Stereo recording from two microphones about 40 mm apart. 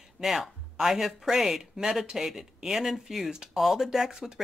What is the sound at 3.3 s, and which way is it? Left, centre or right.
Speech, centre.